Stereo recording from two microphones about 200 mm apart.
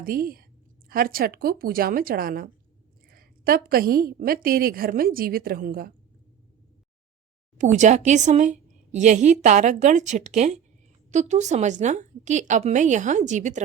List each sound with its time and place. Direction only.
0.0 s a woman's voice: 45° right (ahead or behind)
7.6 s speech: 35° right (ahead or behind)